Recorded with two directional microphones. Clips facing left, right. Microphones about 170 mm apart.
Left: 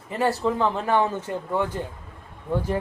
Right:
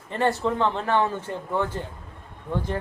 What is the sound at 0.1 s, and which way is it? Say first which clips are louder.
Speech: even; 5° left (ahead or behind).